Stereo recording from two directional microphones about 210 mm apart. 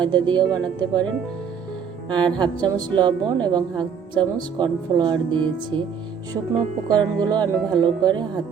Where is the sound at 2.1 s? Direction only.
20° right (ahead or behind).